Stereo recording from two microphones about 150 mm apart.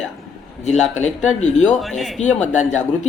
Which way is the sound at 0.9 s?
50° left (ahead or behind).